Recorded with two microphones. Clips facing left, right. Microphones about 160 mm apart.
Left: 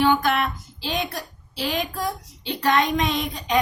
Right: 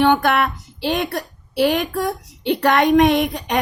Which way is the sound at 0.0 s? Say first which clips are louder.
Right 4 dB; 60° right (ahead or behind).